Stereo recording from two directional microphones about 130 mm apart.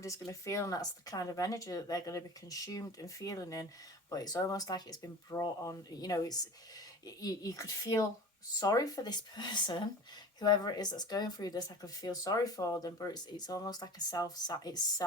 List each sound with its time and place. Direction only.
0.0 s speech: 25° left (ahead or behind)